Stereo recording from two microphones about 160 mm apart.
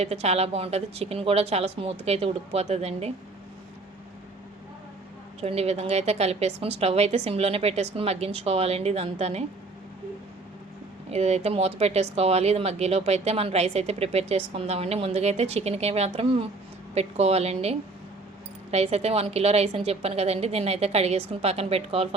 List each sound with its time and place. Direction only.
0.0 s speech: 40° right (ahead or behind)
5.4 s speech: 40° right (ahead or behind)
11.1 s speech: 40° right (ahead or behind)